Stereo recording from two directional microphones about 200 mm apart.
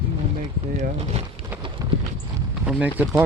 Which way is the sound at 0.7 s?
35° right (ahead or behind).